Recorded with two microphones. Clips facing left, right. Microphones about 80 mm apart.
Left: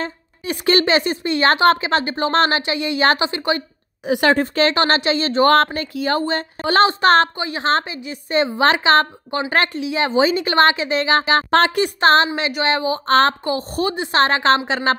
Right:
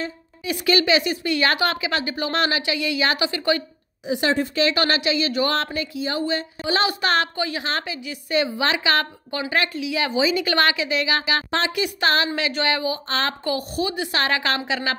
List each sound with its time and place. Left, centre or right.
0.0 s a woman's voice: left
3.2 s a woman's voice: left
4.0 s speech: left
4.4 s a woman's voice: left
5.9 s speech: left
6.9 s a woman's voice: left
7.3 s a woman's voice: left
7.6 s a woman's voice: left
13.0 s speech: left
13.4 s a woman's voice: left